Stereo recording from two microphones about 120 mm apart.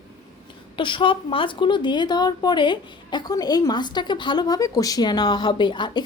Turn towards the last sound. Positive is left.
turn(degrees=40)  # may be behind; listen again after turning